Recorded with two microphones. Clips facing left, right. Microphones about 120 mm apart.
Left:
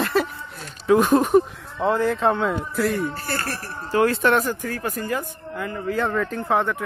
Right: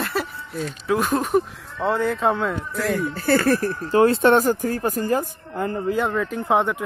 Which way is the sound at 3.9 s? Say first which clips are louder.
Right 3 dB; 25° right (ahead or behind).